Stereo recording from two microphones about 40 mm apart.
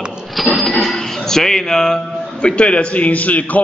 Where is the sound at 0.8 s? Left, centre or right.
Centre.